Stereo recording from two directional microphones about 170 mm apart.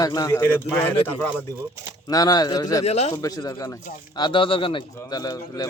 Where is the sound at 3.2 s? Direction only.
20° left (ahead or behind).